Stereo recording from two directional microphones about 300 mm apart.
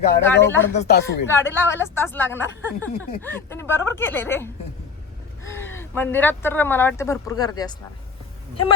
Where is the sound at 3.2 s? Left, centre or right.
Centre.